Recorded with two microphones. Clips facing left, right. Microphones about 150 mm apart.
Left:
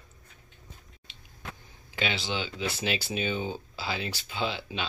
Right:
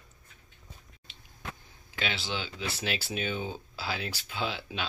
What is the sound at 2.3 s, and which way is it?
Speech, centre (ahead or behind).